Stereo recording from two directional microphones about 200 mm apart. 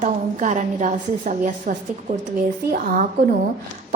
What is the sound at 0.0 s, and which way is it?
A woman's voice, 35° right (ahead or behind).